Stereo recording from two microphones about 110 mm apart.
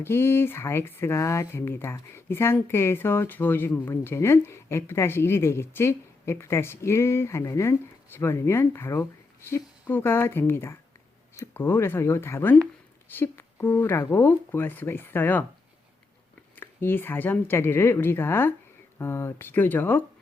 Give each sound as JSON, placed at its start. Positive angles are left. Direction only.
{"t": 0.0, "sound": "speech", "side_deg": 20}
{"t": 16.6, "sound": "speech", "side_deg": 20}